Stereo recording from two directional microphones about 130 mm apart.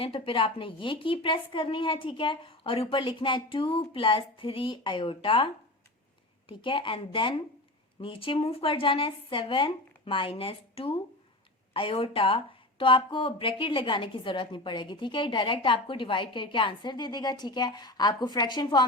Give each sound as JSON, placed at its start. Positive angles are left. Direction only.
{"t": 0.0, "sound": "a woman's voice", "side_deg": 45}
{"t": 6.5, "sound": "a woman's voice", "side_deg": 40}